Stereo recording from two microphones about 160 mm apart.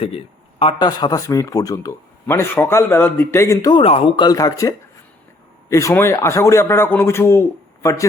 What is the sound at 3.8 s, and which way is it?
A man's voice, 35° left (ahead or behind).